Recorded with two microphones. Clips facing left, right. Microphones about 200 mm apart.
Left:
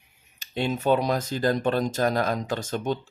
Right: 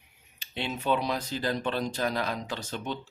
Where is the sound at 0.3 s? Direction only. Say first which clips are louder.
Left 7 dB; 45° left (ahead or behind).